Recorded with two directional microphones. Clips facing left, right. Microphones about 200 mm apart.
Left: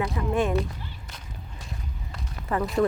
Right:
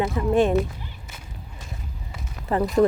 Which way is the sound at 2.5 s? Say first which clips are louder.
Right 4 dB; 30° right (ahead or behind).